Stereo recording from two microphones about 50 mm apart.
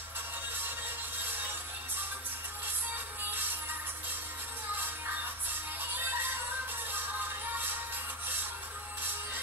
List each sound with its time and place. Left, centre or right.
5.5 s music: right